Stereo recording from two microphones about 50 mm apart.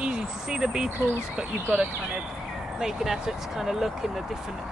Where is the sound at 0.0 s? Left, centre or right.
Centre.